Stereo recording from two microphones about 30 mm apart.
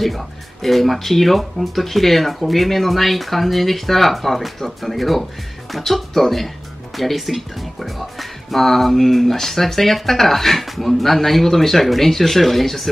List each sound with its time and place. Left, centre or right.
0.0 s speech: centre